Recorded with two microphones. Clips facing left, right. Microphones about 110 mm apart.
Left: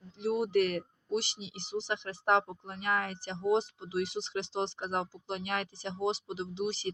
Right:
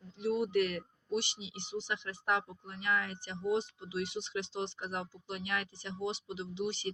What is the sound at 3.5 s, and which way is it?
Speech, 80° left.